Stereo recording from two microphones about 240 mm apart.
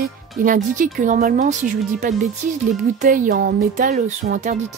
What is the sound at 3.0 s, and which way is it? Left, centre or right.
Speech, right.